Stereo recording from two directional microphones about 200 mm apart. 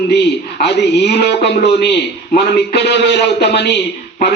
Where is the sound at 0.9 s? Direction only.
55° left (ahead or behind).